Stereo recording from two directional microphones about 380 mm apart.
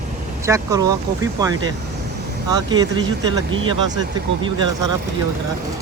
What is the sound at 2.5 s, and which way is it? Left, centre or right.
Speech, centre.